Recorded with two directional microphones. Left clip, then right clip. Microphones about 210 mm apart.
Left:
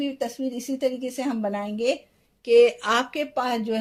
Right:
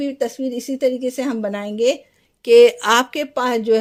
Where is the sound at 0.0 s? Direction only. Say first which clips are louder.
Right 6 dB; 50° right (ahead or behind).